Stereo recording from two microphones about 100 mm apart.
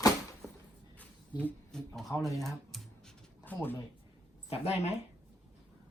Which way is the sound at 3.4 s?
20° left (ahead or behind).